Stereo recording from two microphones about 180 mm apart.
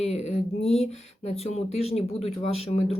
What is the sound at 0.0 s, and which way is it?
Speech, 35° left (ahead or behind).